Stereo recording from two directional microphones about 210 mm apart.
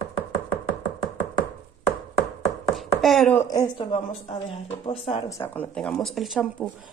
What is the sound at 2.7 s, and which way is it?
Speech, centre (ahead or behind).